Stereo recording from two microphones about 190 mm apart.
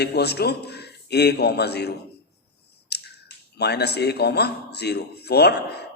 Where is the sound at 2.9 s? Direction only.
60° left (ahead or behind).